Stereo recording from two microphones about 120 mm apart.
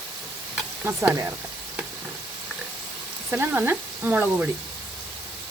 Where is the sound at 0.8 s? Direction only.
20° right (ahead or behind).